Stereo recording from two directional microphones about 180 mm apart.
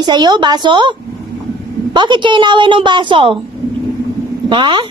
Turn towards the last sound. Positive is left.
turn(degrees=-25)  # may be behind; listen again after turning